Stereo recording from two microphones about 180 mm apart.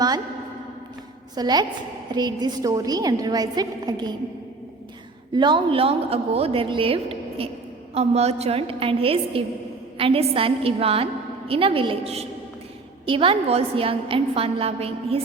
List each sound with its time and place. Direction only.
1.4 s a woman's voice: 20° right (ahead or behind)
5.3 s a woman's voice: 25° right (ahead or behind)